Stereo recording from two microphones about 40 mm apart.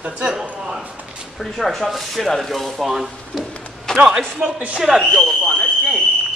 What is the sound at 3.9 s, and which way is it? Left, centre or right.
Speech, centre.